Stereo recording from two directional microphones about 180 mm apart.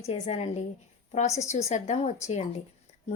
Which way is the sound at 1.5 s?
40° left (ahead or behind).